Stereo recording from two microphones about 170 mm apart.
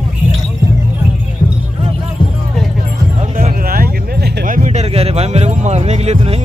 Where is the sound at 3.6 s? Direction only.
60° right (ahead or behind).